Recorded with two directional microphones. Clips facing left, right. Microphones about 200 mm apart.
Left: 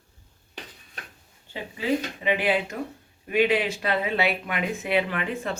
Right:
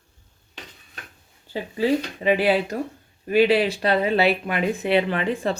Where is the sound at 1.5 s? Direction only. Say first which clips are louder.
Right 5 dB; 35° right (ahead or behind).